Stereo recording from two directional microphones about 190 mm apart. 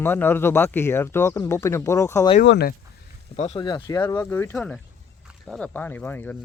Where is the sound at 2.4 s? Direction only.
70° left (ahead or behind).